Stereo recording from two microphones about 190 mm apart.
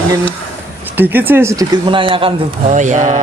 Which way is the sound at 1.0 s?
10° right (ahead or behind).